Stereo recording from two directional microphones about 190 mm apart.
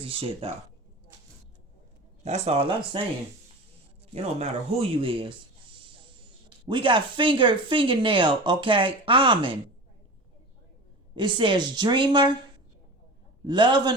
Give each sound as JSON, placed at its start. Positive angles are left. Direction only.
{"t": 0.0, "sound": "speech", "side_deg": -30}
{"t": 2.2, "sound": "speech", "side_deg": -35}
{"t": 4.1, "sound": "speech", "side_deg": -35}
{"t": 6.7, "sound": "speech", "side_deg": -25}
{"t": 11.1, "sound": "speech", "side_deg": -25}
{"t": 13.5, "sound": "speech", "side_deg": -25}